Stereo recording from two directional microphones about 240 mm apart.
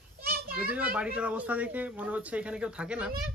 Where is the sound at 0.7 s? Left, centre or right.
Centre.